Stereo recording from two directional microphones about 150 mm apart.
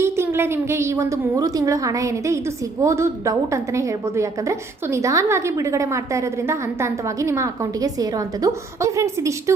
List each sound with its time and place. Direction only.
0.0 s a woman's voice: 15° right (ahead or behind)